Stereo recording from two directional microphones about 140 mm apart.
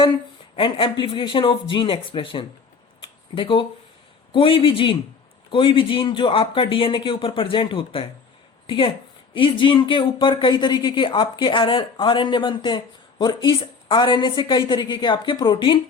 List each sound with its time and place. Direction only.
0.5 s speech: 35° left (ahead or behind)
3.0 s a sound: 35° left (ahead or behind)
4.3 s speech: 40° left (ahead or behind)